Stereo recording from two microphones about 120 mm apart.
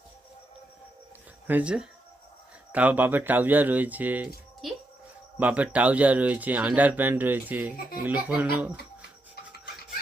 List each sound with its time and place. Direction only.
1.5 s speech: 10° right (ahead or behind)
4.6 s music: centre (ahead or behind)
5.4 s speech: 10° right (ahead or behind)